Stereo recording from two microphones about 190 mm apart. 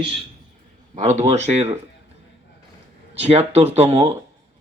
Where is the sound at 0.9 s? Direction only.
40° right (ahead or behind).